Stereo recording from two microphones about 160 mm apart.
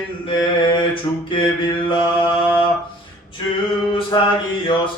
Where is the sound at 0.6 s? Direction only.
30° left (ahead or behind).